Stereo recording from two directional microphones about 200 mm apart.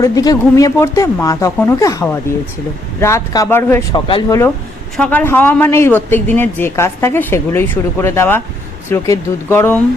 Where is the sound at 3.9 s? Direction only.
25° left (ahead or behind).